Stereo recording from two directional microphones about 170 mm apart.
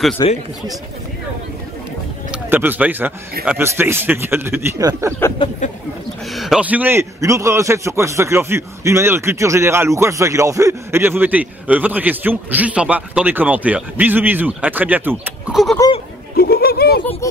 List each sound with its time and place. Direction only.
0.2 s speech: 25° left (ahead or behind)
2.3 s a man's voice: 10° right (ahead or behind)
5.6 s speech: 45° left (ahead or behind)
6.3 s a man's voice: centre (ahead or behind)
16.3 s speech: 65° left (ahead or behind)